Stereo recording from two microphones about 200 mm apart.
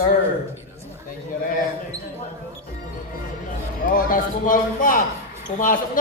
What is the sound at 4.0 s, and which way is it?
A man's voice, 45° left (ahead or behind).